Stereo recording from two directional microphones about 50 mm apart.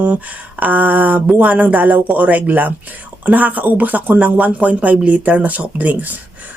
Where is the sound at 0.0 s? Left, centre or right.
Right.